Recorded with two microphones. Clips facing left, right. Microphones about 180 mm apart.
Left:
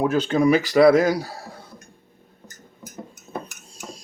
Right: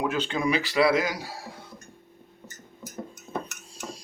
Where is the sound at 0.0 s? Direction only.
40° left (ahead or behind).